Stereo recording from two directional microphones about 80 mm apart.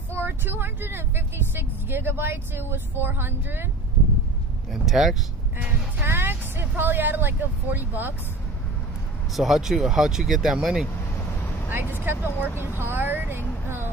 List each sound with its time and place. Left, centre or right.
0.1 s speech: right
4.8 s speech: centre
5.6 s speech: right
9.3 s speech: centre
11.7 s speech: right